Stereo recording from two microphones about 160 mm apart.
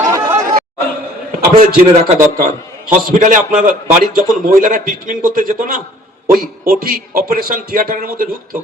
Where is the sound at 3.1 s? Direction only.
55° right (ahead or behind).